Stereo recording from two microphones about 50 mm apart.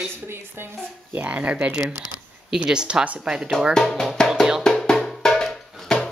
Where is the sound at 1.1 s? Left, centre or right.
Right.